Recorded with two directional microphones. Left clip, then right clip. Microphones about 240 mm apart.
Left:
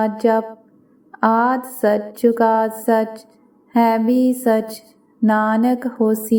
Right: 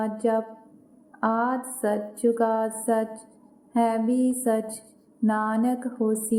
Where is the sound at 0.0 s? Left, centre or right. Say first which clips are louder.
Left 8 dB; left.